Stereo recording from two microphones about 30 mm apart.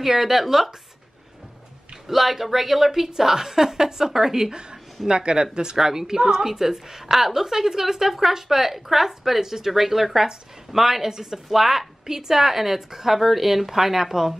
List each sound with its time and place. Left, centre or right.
0.0 s a woman's voice: centre
2.0 s a woman's voice: centre
4.5 s a woman's voice: right
11.6 s a woman's voice: centre
12.1 s a woman's voice: centre